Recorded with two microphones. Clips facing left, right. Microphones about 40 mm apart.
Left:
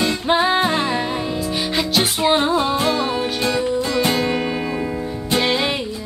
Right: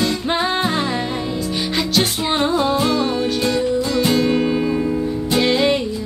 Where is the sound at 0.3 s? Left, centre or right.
Centre.